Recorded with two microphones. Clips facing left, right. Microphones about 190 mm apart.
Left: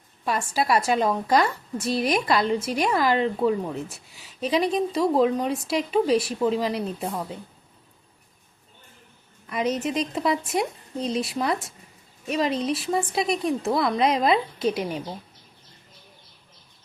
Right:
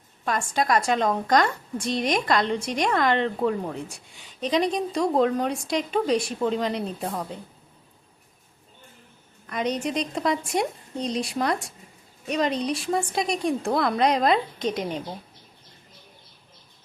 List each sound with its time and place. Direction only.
0.5 s speech: 5° left (ahead or behind)
9.5 s speech: 5° left (ahead or behind)